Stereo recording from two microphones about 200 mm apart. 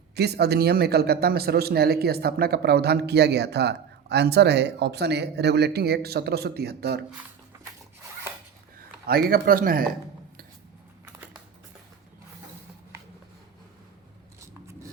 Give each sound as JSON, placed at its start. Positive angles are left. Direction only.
{"t": 0.2, "sound": "a man's voice", "side_deg": -55}
{"t": 9.3, "sound": "a man's voice", "side_deg": -45}